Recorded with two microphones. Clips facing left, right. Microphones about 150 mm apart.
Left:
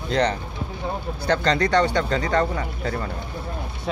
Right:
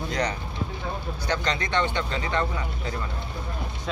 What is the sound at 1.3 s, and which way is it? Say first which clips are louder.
Speech: left 7 dB; 35° left (ahead or behind).